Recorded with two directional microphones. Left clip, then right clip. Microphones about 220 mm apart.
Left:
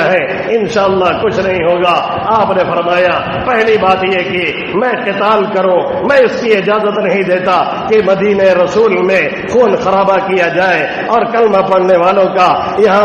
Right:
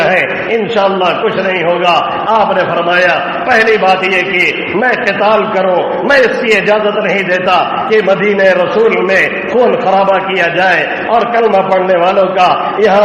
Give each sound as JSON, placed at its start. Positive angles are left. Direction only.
{"t": 0.1, "sound": "a sound", "side_deg": 30}
{"t": 6.1, "sound": "a man's voice", "side_deg": 25}
{"t": 8.2, "sound": "a man's voice", "side_deg": 30}
{"t": 9.9, "sound": "a man's voice", "side_deg": 30}